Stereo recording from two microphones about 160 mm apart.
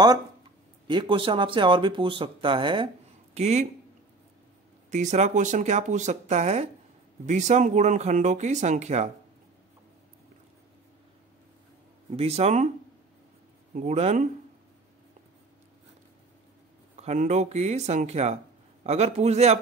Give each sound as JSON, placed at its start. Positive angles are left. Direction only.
{"t": 0.8, "sound": "speech", "side_deg": -30}
{"t": 3.3, "sound": "speech", "side_deg": -45}
{"t": 4.9, "sound": "speech", "side_deg": -50}
{"t": 12.1, "sound": "speech", "side_deg": -40}
{"t": 13.7, "sound": "speech", "side_deg": -45}
{"t": 17.0, "sound": "speech", "side_deg": -45}